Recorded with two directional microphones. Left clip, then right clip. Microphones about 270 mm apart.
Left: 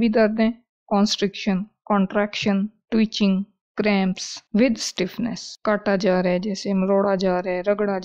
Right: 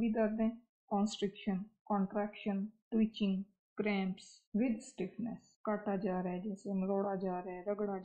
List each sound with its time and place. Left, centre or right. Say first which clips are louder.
0.0 s speech: left 16 dB; left